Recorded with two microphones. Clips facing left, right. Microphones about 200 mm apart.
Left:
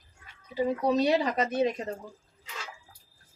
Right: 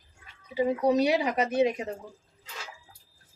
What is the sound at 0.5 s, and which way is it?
Speech, 10° right (ahead or behind).